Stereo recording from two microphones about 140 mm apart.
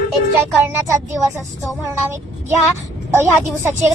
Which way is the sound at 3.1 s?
15° right (ahead or behind).